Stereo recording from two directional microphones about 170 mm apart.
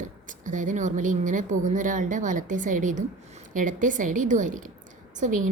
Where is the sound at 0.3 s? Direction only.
50° right (ahead or behind).